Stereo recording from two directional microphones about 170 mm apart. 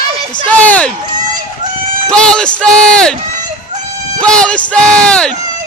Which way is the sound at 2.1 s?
5° left (ahead or behind).